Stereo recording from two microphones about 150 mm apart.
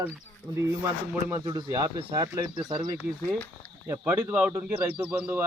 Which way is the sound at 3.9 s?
15° right (ahead or behind).